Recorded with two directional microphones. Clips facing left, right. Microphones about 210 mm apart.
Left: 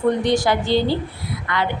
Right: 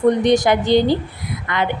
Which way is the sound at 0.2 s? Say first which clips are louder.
Right 4 dB; 20° right (ahead or behind).